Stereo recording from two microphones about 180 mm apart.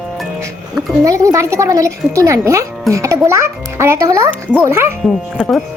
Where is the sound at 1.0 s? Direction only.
20° right (ahead or behind).